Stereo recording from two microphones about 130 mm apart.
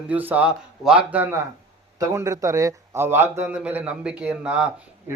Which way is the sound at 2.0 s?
25° right (ahead or behind).